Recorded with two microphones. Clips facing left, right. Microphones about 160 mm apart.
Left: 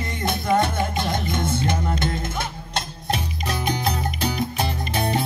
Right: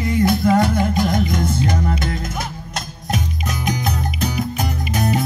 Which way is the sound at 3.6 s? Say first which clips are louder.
Right 2 dB; 30° left (ahead or behind).